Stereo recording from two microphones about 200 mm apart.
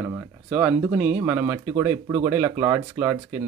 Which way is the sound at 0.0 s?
5° right (ahead or behind).